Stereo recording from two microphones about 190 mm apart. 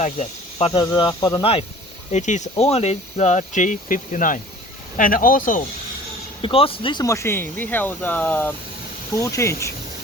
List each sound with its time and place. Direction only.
0.0 s speech: 35° left (ahead or behind)
2.0 s speech: 40° left (ahead or behind)
6.4 s speech: 30° left (ahead or behind)